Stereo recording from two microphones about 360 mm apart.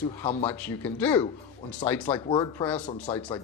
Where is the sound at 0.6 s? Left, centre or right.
Centre.